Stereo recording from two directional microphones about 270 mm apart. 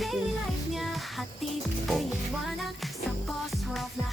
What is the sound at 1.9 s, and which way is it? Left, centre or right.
Music, centre.